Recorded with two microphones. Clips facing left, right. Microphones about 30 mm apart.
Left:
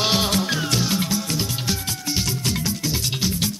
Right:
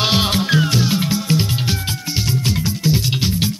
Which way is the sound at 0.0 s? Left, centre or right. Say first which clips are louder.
Right 3 dB; right.